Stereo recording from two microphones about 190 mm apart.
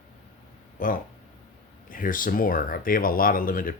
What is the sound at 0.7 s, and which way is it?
Speech, 45° left (ahead or behind).